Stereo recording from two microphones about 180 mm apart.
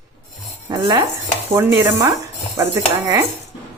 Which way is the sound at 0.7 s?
25° right (ahead or behind).